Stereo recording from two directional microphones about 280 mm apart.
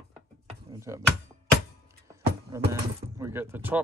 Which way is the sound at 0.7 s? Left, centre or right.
Centre.